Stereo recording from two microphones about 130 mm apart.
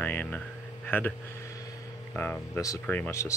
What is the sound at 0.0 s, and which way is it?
Speech, 15° left (ahead or behind).